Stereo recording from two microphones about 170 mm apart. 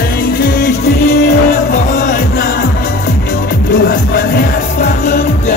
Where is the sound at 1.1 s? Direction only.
60° left (ahead or behind).